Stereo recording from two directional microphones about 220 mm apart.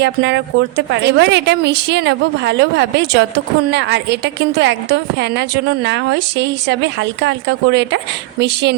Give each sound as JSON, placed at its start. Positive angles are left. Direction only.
{"t": 0.0, "sound": "a woman's voice", "side_deg": -50}